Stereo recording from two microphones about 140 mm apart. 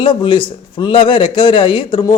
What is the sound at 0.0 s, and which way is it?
A man's voice, 35° left (ahead or behind).